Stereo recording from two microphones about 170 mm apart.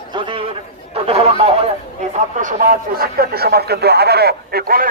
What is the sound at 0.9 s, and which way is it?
Speech, 35° right (ahead or behind).